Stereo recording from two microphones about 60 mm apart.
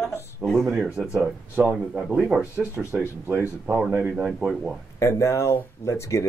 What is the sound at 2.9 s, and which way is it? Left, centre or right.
Speech, right.